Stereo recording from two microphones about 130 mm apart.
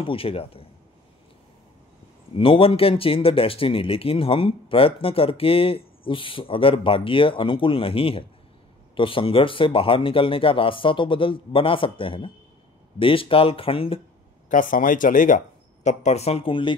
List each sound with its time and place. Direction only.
0.0 s speech: 45° left (ahead or behind)
2.3 s speech: 45° left (ahead or behind)
14.5 s speech: 90° left; by 16.7 s 40° left (ahead or behind)